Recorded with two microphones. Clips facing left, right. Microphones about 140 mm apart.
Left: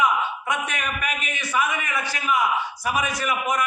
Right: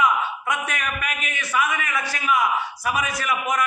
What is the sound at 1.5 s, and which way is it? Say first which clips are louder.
A man's voice: right 1 dB; 25° left (ahead or behind).